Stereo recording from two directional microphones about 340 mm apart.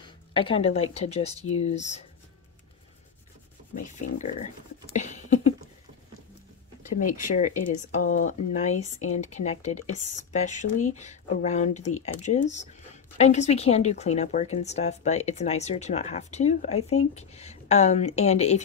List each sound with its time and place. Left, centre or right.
0.3 s a woman's voice: centre
4.9 s a sound: left
6.8 s speech: left